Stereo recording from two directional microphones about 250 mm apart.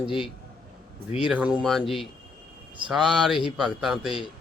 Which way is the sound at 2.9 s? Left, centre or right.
Centre.